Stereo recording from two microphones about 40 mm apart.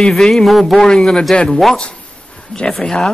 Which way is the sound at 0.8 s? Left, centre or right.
Centre.